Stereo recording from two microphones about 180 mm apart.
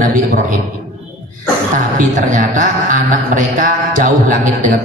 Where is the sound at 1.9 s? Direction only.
45° right (ahead or behind).